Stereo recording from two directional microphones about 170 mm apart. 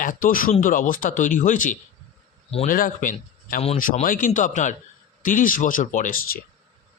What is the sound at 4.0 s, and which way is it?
Speech, 50° left (ahead or behind).